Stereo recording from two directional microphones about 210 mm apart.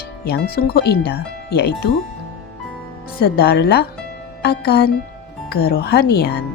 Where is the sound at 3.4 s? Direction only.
45° left (ahead or behind).